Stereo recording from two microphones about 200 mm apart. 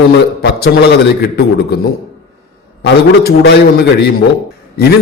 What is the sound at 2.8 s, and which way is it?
A man's voice, 55° left (ahead or behind).